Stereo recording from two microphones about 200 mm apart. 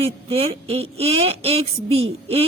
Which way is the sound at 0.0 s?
30° right (ahead or behind).